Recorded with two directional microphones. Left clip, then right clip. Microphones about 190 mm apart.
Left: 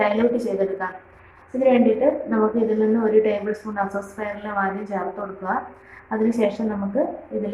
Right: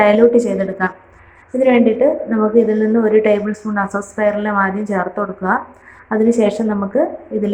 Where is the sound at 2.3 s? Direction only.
25° right (ahead or behind).